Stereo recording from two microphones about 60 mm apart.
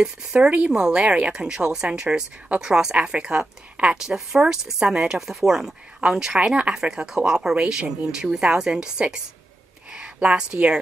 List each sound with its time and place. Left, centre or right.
0.0 s speech: centre